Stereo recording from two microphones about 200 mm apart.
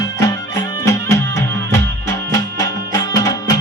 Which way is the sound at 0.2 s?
15° left (ahead or behind).